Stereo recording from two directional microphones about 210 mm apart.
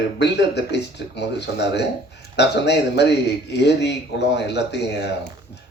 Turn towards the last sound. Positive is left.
turn(degrees=55)  # may be behind; listen again after turning